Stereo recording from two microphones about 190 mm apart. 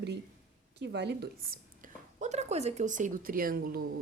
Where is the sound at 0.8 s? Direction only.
60° right (ahead or behind).